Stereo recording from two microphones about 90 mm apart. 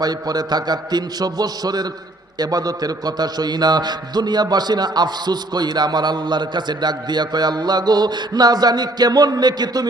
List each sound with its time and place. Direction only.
0.0 s a man's voice: 45° right (ahead or behind)